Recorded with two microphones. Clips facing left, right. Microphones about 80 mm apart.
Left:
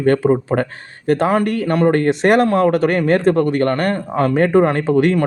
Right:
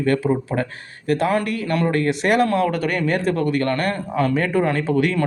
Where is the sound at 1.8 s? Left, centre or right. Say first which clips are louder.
Left 6 dB; left.